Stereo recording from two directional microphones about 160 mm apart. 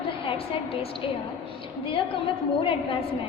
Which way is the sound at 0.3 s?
35° left (ahead or behind).